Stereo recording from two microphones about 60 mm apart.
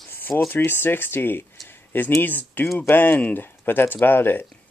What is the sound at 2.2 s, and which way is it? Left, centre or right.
Speech, left.